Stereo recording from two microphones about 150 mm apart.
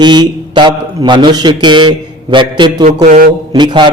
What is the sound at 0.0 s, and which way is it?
Mantra, 30° right (ahead or behind).